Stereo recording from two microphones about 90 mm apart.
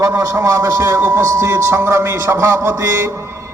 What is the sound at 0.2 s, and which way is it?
A man's voice, 40° right (ahead or behind).